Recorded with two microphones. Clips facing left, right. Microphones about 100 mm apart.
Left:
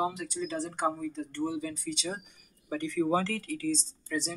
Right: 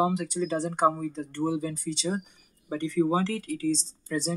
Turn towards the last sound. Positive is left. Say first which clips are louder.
# right 4 dB
turn(degrees=-40)  # may be behind; listen again after turning